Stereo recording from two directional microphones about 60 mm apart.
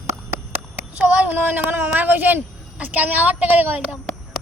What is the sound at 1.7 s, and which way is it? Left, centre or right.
A woman's voice, right.